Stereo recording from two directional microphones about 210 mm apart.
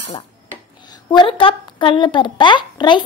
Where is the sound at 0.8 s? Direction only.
20° left (ahead or behind).